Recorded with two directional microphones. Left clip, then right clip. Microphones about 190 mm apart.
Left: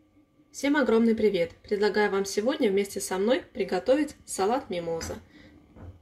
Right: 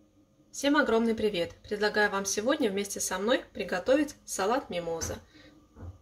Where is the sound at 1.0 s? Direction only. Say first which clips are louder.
Left 5 dB; 30° left (ahead or behind).